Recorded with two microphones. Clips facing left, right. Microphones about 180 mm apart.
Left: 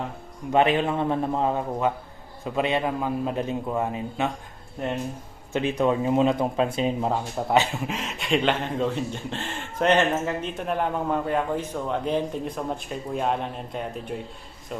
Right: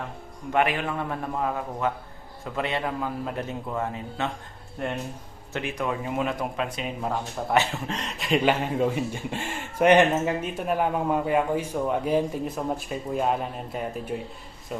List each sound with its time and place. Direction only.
0.5 s speech: 25° left (ahead or behind)
5.5 s speech: 25° left (ahead or behind)
7.9 s speech: centre (ahead or behind)